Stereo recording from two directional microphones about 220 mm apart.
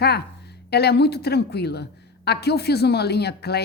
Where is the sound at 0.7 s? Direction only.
50° left (ahead or behind).